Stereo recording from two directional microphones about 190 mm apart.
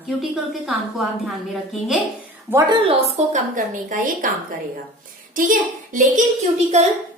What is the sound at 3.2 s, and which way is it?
A woman's voice, 35° right (ahead or behind).